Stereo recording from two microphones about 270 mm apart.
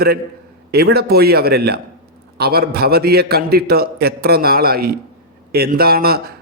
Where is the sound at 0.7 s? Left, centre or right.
Right.